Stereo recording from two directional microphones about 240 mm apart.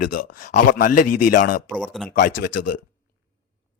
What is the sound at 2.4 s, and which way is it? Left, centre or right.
Speech, left.